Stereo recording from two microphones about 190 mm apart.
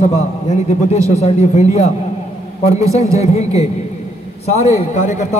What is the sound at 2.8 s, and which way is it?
Speech, 15° right (ahead or behind).